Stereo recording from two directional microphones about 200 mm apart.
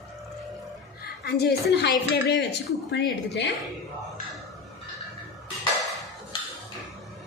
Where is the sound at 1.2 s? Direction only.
55° left (ahead or behind).